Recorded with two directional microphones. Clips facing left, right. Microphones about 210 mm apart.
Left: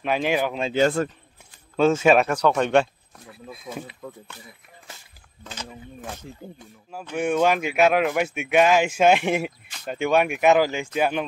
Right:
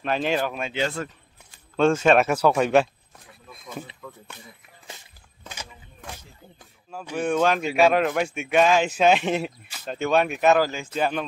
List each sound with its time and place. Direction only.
0.0 s speech: 10° left (ahead or behind)
0.7 s a man's voice: 45° left (ahead or behind)
1.8 s speech: 5° left (ahead or behind)
2.2 s speech: 5° right (ahead or behind)
7.2 s speech: 10° left (ahead or behind)